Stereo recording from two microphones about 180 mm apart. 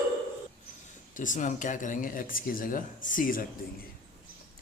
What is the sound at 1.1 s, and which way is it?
Speech, 45° left (ahead or behind).